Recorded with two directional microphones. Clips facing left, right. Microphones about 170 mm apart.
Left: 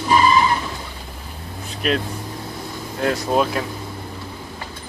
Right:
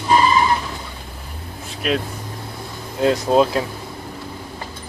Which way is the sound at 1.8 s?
Centre (ahead or behind).